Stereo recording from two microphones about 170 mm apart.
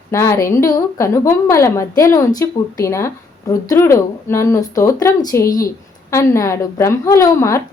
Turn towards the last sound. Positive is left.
turn(degrees=20)  # may be behind; listen again after turning